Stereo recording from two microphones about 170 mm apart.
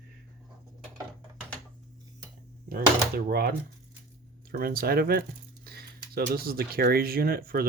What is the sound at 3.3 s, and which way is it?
Speech, 65° right (ahead or behind).